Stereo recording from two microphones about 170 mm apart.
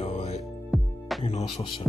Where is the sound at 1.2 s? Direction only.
40° left (ahead or behind).